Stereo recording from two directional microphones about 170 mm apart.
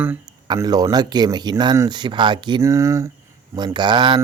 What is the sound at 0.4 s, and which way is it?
Speech, 25° right (ahead or behind).